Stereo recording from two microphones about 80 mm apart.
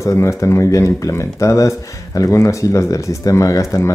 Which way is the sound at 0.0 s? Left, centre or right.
Left.